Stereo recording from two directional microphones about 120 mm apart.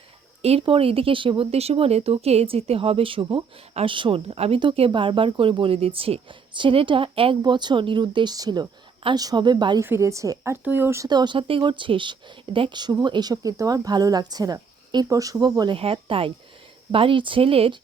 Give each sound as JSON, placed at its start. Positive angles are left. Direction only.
{"t": 0.6, "sound": "a woman's voice", "side_deg": -50}
{"t": 9.8, "sound": "a woman's voice", "side_deg": -20}
{"t": 11.1, "sound": "a woman's voice", "side_deg": -40}
{"t": 15.8, "sound": "a woman's voice", "side_deg": -50}